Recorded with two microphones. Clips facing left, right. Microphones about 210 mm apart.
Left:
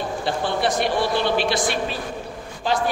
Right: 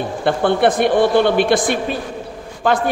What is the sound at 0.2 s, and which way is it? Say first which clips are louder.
A woman's voice: right 9 dB; 55° right (ahead or behind).